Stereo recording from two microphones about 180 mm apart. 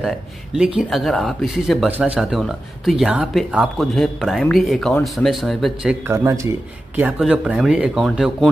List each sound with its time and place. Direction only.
0.7 s speech: centre (ahead or behind)
6.0 s speech: 15° right (ahead or behind); by 8.5 s centre (ahead or behind)